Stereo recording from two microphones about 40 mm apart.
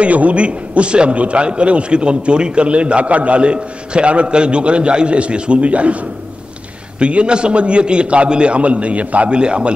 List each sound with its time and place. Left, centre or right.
0.0 s a man's voice: right